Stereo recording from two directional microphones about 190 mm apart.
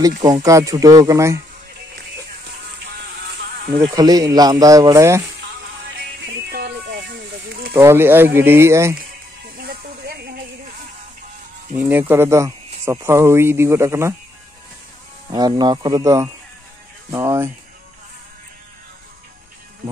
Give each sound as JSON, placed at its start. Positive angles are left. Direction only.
{"t": 0.2, "sound": "speech", "side_deg": -20}
{"t": 3.9, "sound": "speech", "side_deg": -20}
{"t": 6.2, "sound": "music", "side_deg": -55}
{"t": 7.7, "sound": "speech", "side_deg": -15}
{"t": 9.6, "sound": "music", "side_deg": -55}
{"t": 11.7, "sound": "speech", "side_deg": -10}
{"t": 15.3, "sound": "speech", "side_deg": -20}